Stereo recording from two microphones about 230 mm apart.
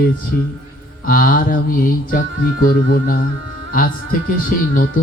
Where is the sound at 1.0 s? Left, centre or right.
Left.